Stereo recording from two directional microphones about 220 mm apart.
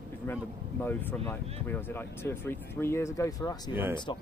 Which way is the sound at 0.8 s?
10° left (ahead or behind).